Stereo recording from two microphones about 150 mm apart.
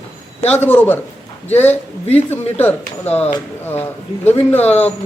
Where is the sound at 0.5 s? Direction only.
15° left (ahead or behind).